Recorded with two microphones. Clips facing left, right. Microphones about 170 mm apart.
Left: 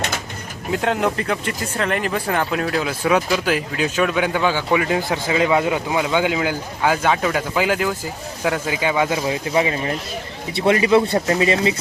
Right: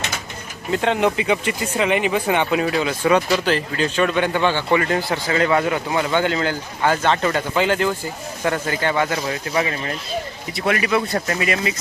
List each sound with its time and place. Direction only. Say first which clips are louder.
0.7 s speech: right 1 dB; centre (ahead or behind); by 11.7 s 25° left (ahead or behind)